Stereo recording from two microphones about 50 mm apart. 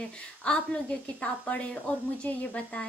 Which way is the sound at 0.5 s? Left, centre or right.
Left.